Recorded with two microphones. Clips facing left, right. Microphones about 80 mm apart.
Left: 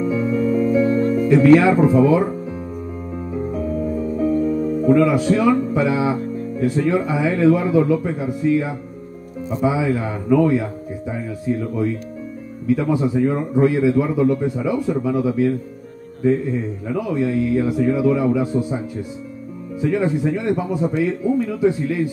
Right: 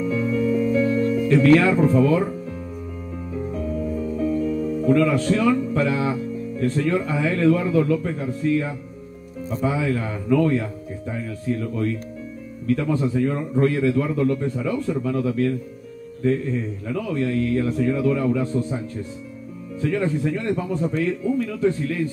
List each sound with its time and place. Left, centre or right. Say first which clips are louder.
0.1 s music: left 1 dB; centre
0.8 s music: left 3 dB; left
1.3 s a man's voice: left 4 dB; centre
3.4 s music: left 3 dB; centre
4.3 s music: left 5 dB; left
4.6 s speech: left 3 dB; centre
5.7 s music: left 3 dB; centre
6.1 s music: left 3 dB; left
6.5 s a man's voice: left 3 dB; centre